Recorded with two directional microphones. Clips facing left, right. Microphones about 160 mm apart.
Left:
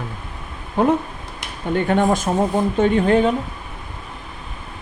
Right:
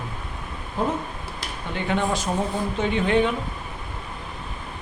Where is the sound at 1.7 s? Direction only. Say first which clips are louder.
Left 7 dB; 50° left (ahead or behind).